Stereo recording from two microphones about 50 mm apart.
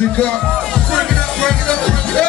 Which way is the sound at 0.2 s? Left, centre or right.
Centre.